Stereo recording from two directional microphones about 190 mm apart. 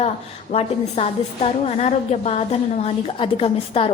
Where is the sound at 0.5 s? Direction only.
35° left (ahead or behind).